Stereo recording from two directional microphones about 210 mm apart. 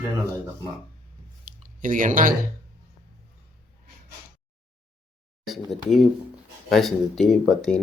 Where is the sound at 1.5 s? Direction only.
40° right (ahead or behind).